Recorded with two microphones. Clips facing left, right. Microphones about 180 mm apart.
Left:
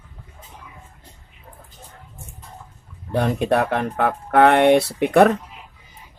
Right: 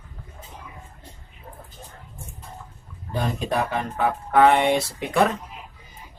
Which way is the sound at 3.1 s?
65° left (ahead or behind).